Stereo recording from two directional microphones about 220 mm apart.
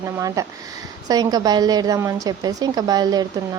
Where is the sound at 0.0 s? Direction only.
15° right (ahead or behind).